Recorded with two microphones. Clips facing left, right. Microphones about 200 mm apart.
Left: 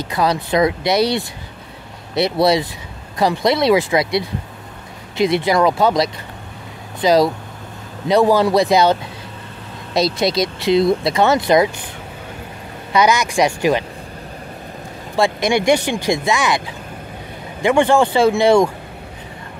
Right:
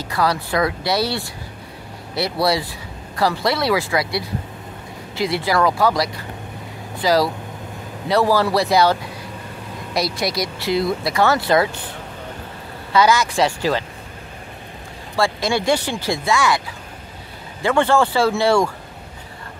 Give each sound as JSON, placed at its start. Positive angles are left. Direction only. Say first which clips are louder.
{"t": 0.0, "sound": "speech", "louder": "left 2 dB", "side_deg": 20}
{"t": 9.9, "sound": "speech", "louder": "left 5 dB", "side_deg": 25}
{"t": 12.9, "sound": "speech", "louder": "left 1 dB", "side_deg": 20}
{"t": 15.1, "sound": "speech", "louder": "left 3 dB", "side_deg": 20}